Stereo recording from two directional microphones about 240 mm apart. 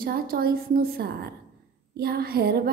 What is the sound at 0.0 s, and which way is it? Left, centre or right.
A woman's voice, right.